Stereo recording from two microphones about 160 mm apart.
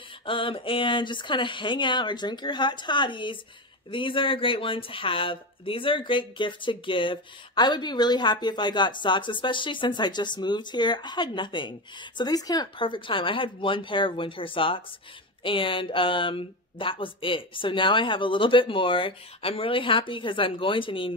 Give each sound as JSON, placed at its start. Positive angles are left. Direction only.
{"t": 0.2, "sound": "speech", "side_deg": 35}